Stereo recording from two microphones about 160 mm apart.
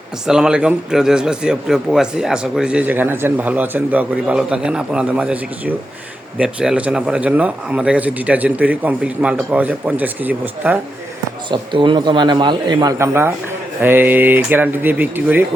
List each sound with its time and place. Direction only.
0.3 s a man's voice: 5° right (ahead or behind)
11.5 s a man's voice: 30° right (ahead or behind); by 15.4 s 10° right (ahead or behind)